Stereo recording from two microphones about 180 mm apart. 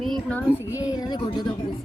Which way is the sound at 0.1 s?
5° left (ahead or behind).